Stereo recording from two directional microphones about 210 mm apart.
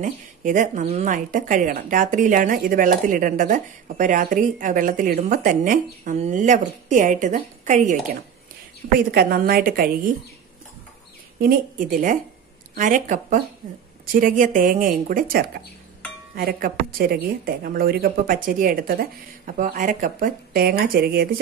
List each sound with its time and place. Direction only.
0.0 s a woman's voice: 40° right (ahead or behind)
11.3 s a woman's voice: 45° right (ahead or behind)